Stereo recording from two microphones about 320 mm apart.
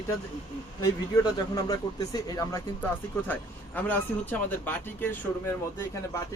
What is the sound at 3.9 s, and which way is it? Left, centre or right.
Speech, centre.